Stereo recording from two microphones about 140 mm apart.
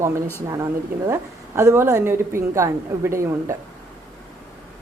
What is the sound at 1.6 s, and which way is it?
A woman's voice, 20° right (ahead or behind).